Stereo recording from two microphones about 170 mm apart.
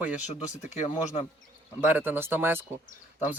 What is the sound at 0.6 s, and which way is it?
Speech, 45° left (ahead or behind).